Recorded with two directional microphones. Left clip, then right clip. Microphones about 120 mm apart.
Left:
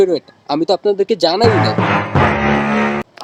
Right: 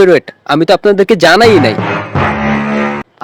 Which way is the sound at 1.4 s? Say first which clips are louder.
Right 6 dB; 65° right (ahead or behind).